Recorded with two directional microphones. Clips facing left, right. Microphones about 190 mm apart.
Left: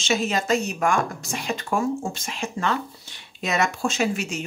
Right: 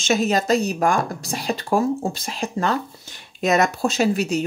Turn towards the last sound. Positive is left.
turn(degrees=-35)  # may be behind; listen again after turning